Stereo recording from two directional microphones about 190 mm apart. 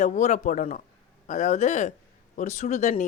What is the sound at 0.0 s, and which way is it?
Speech, 40° left (ahead or behind).